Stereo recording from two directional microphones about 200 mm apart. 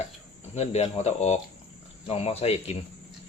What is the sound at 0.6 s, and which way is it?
Speech, 30° left (ahead or behind).